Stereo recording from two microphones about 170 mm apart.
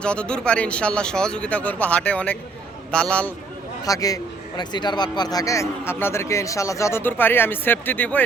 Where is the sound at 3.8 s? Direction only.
20° left (ahead or behind).